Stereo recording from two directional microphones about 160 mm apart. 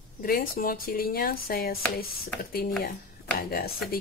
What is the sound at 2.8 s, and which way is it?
Speech, 70° left (ahead or behind).